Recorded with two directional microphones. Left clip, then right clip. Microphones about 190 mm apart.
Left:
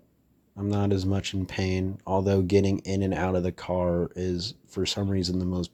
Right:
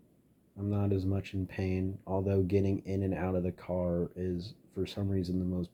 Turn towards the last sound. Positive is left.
turn(degrees=40)  # may be behind; listen again after turning